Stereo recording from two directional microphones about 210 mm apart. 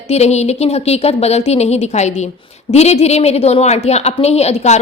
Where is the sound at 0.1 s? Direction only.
30° left (ahead or behind).